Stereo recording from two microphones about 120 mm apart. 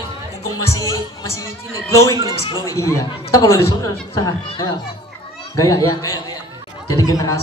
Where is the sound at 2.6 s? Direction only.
25° left (ahead or behind).